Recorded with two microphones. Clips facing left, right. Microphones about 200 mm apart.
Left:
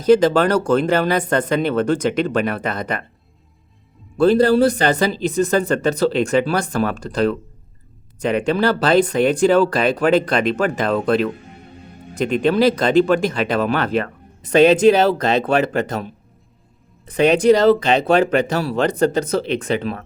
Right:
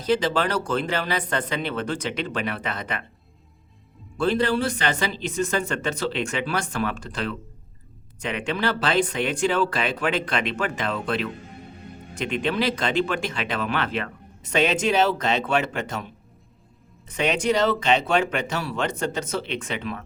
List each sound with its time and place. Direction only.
0.0 s speech: 45° left (ahead or behind)
4.2 s speech: 40° left (ahead or behind)